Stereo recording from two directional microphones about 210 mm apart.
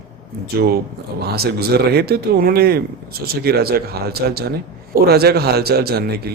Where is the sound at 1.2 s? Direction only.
50° right (ahead or behind).